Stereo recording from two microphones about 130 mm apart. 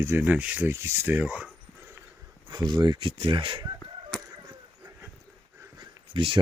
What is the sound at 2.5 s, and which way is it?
Speech, 30° right (ahead or behind).